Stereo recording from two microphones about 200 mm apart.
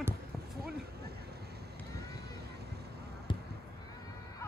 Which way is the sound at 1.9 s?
55° right (ahead or behind).